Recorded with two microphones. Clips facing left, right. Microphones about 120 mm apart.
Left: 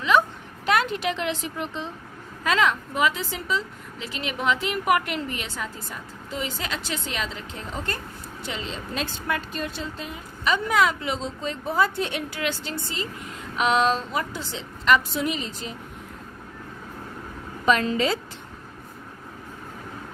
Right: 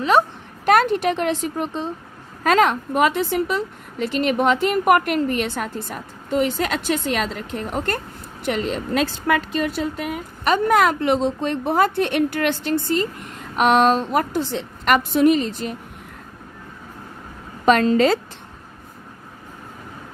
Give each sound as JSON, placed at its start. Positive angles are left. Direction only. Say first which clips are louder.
{"t": 0.6, "sound": "a woman's voice", "louder": "right 7 dB", "side_deg": -50}
{"t": 17.9, "sound": "a woman's voice", "louder": "right 8 dB", "side_deg": -50}